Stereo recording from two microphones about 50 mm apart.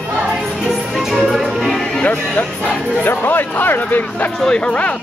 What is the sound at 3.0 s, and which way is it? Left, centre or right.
Speech, left.